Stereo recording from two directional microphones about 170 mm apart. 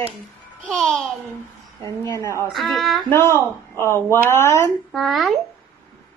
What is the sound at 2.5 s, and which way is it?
Speech, centre (ahead or behind).